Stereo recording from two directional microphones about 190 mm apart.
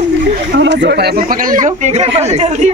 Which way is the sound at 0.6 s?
70° right (ahead or behind).